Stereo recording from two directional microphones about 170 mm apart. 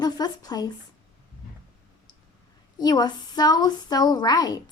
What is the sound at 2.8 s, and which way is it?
A woman's voice, 25° left (ahead or behind).